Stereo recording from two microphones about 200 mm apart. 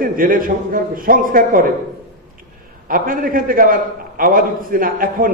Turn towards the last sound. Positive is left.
turn(degrees=-45)  # may be behind; listen again after turning